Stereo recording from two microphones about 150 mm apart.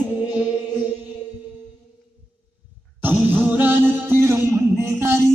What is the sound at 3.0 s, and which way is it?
Music, 15° right (ahead or behind).